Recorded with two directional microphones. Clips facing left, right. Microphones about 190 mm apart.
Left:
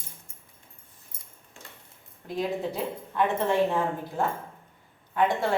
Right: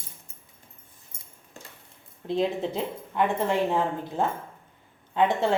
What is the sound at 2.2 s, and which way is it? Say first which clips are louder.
A woman's voice: right 3 dB; 25° right (ahead or behind).